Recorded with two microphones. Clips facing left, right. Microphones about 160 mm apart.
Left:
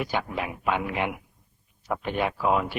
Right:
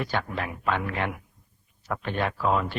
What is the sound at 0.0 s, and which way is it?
A man's voice, 10° left (ahead or behind).